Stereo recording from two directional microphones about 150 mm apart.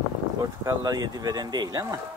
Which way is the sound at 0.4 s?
25° right (ahead or behind).